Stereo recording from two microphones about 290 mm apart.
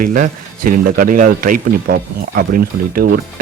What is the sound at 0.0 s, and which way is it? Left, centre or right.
Speech, right.